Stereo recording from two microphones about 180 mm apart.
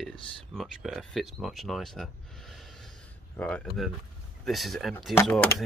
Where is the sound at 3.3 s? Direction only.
5° left (ahead or behind).